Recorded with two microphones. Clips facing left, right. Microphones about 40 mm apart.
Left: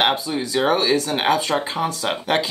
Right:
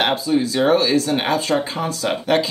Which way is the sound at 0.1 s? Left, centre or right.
Left.